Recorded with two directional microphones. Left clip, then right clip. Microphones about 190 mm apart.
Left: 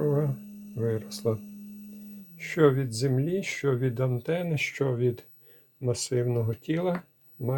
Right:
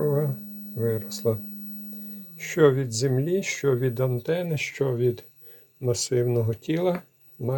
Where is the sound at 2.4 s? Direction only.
20° right (ahead or behind).